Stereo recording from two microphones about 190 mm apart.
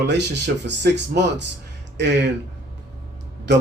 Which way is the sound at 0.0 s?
65° right (ahead or behind).